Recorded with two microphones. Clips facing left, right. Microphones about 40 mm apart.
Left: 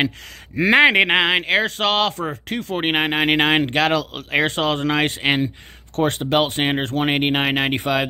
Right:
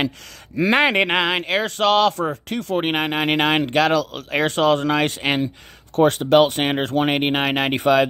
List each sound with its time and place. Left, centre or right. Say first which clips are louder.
0.8 s speech: left 3 dB; left
1.6 s speech: right 2 dB; centre
2.8 s speech: left 4 dB; left
6.0 s speech: right 4 dB; centre